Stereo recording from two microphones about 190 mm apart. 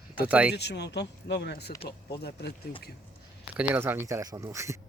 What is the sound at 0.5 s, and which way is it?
Speech, 60° left (ahead or behind).